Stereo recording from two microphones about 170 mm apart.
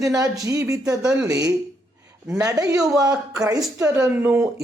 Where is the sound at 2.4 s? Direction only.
20° right (ahead or behind).